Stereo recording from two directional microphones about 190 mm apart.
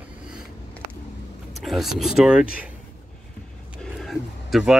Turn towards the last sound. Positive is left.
turn(degrees=0)  # may be behind; listen again after turning